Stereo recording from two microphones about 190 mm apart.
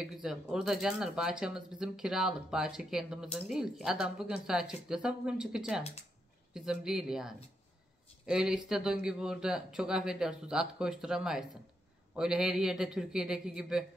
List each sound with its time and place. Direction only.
0.0 s speech: 5° right (ahead or behind)